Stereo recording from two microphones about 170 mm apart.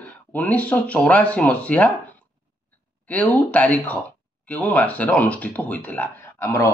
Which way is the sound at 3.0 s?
10° left (ahead or behind).